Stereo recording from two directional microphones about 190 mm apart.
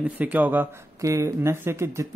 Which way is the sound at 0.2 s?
10° right (ahead or behind).